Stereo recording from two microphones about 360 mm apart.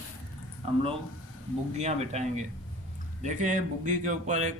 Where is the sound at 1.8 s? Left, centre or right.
Centre.